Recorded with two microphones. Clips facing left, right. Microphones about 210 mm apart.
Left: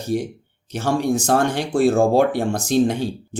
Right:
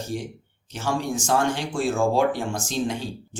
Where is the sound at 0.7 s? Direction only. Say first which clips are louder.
Left 6 dB; 65° left (ahead or behind).